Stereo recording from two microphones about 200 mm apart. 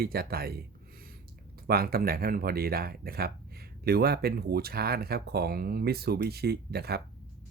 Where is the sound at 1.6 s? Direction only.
50° right (ahead or behind).